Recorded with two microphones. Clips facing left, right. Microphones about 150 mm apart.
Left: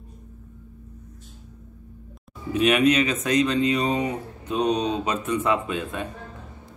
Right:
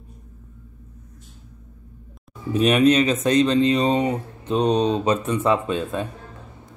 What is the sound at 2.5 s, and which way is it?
Speech, 35° right (ahead or behind).